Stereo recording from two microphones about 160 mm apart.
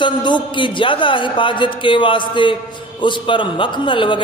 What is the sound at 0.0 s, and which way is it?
A man's voice, 30° left (ahead or behind).